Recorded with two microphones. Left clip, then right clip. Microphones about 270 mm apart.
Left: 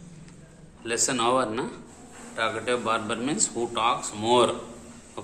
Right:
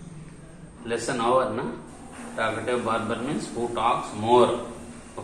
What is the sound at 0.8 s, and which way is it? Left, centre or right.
Speech, left.